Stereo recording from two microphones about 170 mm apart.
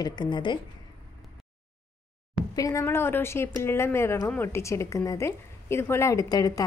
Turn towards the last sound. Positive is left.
turn(degrees=20)  # may be behind; listen again after turning